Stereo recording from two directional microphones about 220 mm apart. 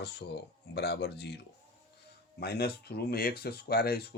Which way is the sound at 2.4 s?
45° left (ahead or behind).